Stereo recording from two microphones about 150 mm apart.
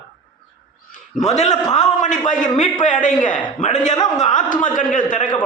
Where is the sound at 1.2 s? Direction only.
50° left (ahead or behind).